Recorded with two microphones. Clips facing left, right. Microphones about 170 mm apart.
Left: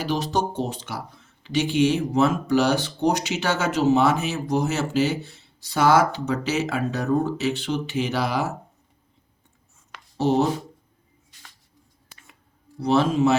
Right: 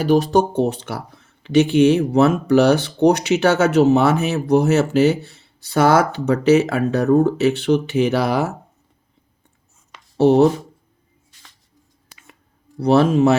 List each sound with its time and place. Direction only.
0.0 s speech: 50° right (ahead or behind)
10.2 s speech: 60° right (ahead or behind)
12.8 s speech: 60° right (ahead or behind)